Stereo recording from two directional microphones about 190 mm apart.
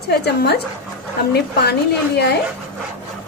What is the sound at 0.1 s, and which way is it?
A woman's voice, 60° left (ahead or behind).